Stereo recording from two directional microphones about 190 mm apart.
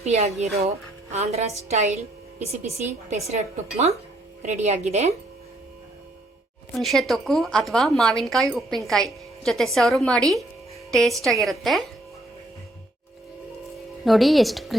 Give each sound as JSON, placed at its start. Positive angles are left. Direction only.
{"t": 0.0, "sound": "a woman's voice", "side_deg": -35}
{"t": 6.7, "sound": "a woman's voice", "side_deg": 0}
{"t": 14.0, "sound": "a woman's voice", "side_deg": 0}